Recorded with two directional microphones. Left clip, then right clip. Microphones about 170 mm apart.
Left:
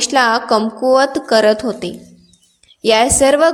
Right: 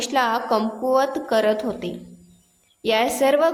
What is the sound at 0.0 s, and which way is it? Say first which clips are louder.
A woman's voice: left 7 dB; 40° left (ahead or behind).